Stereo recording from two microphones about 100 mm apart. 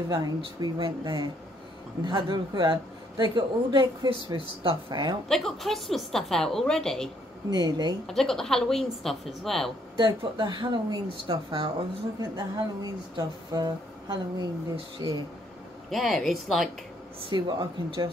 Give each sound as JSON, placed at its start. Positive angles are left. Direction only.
{"t": 0.6, "sound": "a man's voice", "side_deg": -45}
{"t": 5.3, "sound": "a woman's voice", "side_deg": 0}
{"t": 7.4, "sound": "speech", "side_deg": -40}
{"t": 8.1, "sound": "a woman's voice", "side_deg": 5}
{"t": 9.9, "sound": "a man's voice", "side_deg": -50}
{"t": 15.9, "sound": "a woman's voice", "side_deg": 0}
{"t": 17.3, "sound": "a man's voice", "side_deg": -45}